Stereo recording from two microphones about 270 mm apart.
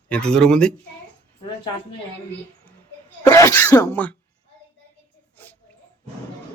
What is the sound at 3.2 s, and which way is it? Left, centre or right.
Speech, centre.